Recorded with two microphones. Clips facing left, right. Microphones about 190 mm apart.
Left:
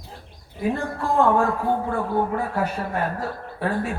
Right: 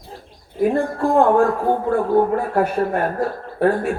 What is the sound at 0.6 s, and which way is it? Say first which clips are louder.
A man's voice: right 7 dB; 55° right (ahead or behind).